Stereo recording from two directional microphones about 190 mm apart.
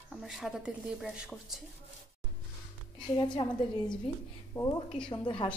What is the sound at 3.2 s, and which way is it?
A woman's voice, 25° left (ahead or behind).